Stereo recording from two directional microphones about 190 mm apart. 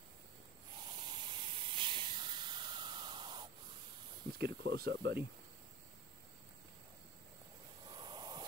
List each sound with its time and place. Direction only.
0.7 s hiss: 25° right (ahead or behind)
4.4 s speech: 55° right (ahead or behind)
7.9 s a sound: 20° right (ahead or behind)